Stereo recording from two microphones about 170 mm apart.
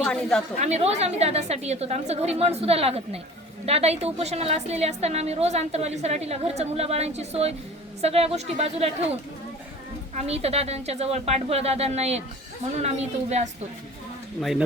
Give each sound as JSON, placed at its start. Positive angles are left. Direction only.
{"t": 0.0, "sound": "speech", "side_deg": 5}
{"t": 0.6, "sound": "a woman's voice", "side_deg": -40}
{"t": 10.2, "sound": "a woman's voice", "side_deg": -35}